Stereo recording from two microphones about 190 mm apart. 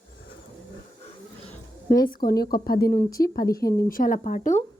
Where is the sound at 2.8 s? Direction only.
15° left (ahead or behind).